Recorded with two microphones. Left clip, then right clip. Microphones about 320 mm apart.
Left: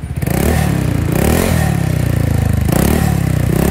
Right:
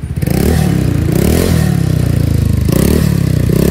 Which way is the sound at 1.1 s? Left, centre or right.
Centre.